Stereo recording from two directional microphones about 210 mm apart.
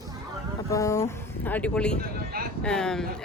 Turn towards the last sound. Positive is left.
turn(degrees=5)  # may be behind; listen again after turning